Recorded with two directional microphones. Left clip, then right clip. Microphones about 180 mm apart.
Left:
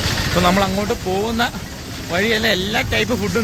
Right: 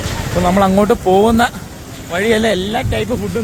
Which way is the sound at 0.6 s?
50° right (ahead or behind).